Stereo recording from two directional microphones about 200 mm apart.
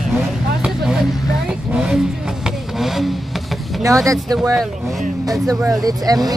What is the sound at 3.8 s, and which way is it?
Speech, 15° right (ahead or behind).